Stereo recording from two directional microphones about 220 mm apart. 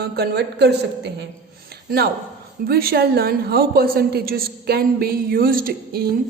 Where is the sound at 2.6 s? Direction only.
45° right (ahead or behind).